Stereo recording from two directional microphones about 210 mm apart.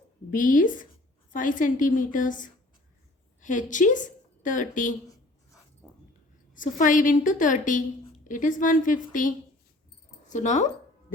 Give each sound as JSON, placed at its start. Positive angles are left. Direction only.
{"t": 0.3, "sound": "a woman's voice", "side_deg": 40}
{"t": 5.8, "sound": "dog", "side_deg": 0}
{"t": 6.5, "sound": "a woman's voice", "side_deg": 40}